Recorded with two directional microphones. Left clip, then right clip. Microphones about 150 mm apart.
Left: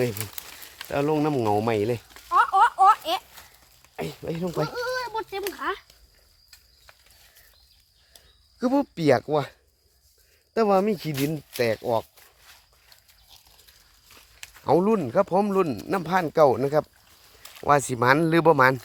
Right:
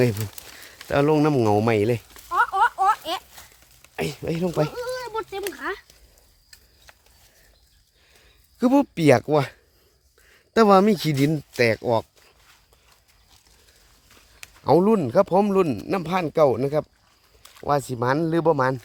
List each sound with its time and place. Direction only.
0.9 s speech: 90° right; by 2.0 s 60° right (ahead or behind)
2.1 s a sound: 40° right (ahead or behind)
3.9 s speech: 90° right
4.7 s a sound: 15° right (ahead or behind)
5.0 s a sound: 30° right (ahead or behind); by 6.0 s 50° right (ahead or behind)
8.5 s speech: 65° right (ahead or behind)
10.5 s speech: 85° right
11.3 s speech: 80° right
14.6 s speech: 45° right (ahead or behind)
15.9 s speech: 30° right (ahead or behind)
17.4 s a sound: 10° right (ahead or behind)
17.9 s speech: 5° left (ahead or behind)